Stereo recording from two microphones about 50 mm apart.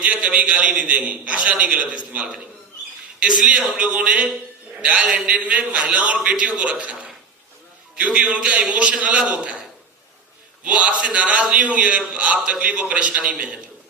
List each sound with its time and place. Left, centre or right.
0.0 s a man's voice: right
0.9 s a man's voice: right
4.0 s a man's voice: centre
10.6 s a man's voice: right